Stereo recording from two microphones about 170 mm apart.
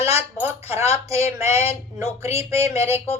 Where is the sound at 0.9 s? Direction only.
15° right (ahead or behind).